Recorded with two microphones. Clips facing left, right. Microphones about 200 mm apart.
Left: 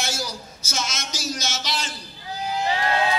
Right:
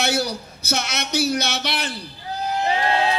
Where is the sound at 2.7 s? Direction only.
25° right (ahead or behind).